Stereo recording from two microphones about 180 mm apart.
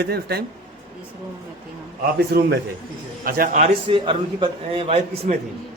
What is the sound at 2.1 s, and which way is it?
Speech, 65° right (ahead or behind).